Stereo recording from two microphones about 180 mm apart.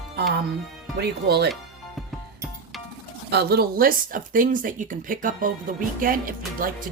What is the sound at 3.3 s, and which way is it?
Speech, 65° right (ahead or behind).